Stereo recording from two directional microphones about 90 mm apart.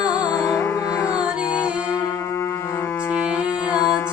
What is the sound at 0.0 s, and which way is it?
Music, 45° left (ahead or behind).